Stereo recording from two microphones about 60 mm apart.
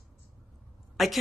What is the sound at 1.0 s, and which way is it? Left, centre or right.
Speech, centre.